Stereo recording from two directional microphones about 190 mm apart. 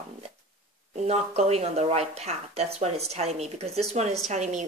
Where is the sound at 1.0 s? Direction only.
35° right (ahead or behind).